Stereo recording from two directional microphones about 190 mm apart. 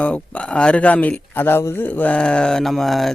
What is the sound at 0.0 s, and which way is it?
Speech, 5° left (ahead or behind).